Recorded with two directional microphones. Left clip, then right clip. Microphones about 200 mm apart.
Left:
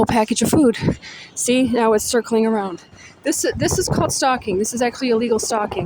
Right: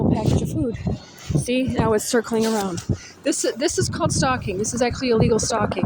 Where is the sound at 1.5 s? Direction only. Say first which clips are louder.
Left 5 dB; 30° left (ahead or behind).